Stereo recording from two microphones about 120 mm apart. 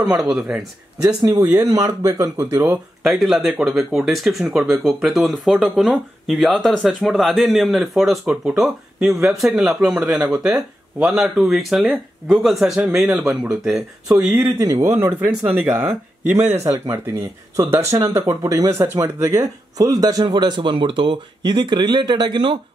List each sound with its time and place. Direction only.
0.0 s speech: 5° right (ahead or behind)
1.0 s speech: 30° right (ahead or behind)
3.0 s speech: centre (ahead or behind); by 22.6 s 45° right (ahead or behind)